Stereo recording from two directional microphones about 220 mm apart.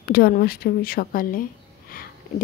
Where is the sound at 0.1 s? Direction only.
45° left (ahead or behind).